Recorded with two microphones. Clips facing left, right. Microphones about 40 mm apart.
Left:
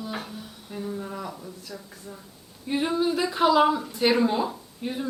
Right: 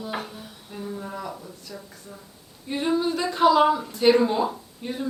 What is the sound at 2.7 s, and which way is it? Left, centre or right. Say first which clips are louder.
Speech: even; centre.